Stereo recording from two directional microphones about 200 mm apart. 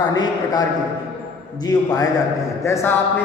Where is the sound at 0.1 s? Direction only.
20° left (ahead or behind).